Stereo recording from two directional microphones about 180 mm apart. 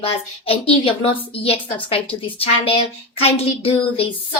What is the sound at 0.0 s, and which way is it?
A woman's voice, 30° left (ahead or behind).